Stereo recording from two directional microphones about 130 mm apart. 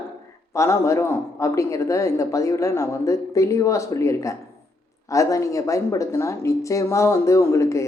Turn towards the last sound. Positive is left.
turn(degrees=25)  # may be behind; listen again after turning